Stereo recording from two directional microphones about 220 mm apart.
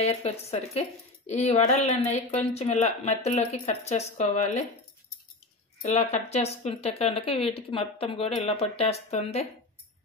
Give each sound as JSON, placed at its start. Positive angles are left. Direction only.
{"t": 0.0, "sound": "a woman's voice", "side_deg": 30}
{"t": 5.8, "sound": "a woman's voice", "side_deg": 30}